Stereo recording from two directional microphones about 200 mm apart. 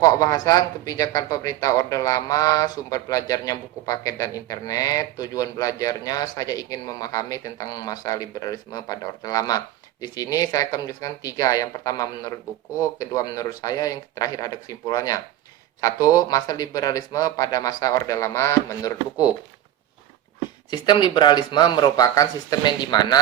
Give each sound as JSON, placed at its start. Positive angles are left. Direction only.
{"t": 0.0, "sound": "speech", "side_deg": 15}
{"t": 20.7, "sound": "speech", "side_deg": 20}